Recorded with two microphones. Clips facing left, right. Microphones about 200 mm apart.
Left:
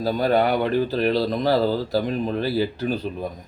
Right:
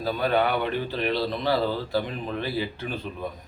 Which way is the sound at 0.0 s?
40° left (ahead or behind).